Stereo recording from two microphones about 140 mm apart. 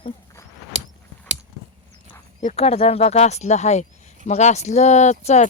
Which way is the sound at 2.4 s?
50° left (ahead or behind).